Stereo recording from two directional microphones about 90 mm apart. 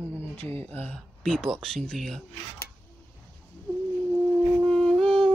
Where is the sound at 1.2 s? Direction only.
5° left (ahead or behind).